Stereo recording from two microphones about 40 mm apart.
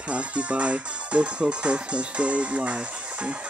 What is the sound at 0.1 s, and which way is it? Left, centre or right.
Speech, right.